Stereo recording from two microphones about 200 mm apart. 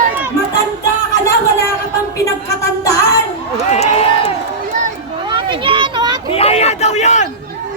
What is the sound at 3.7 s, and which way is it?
Crowd, 30° left (ahead or behind).